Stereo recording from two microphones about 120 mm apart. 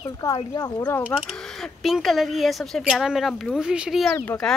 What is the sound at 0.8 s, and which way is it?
Speech, 15° left (ahead or behind).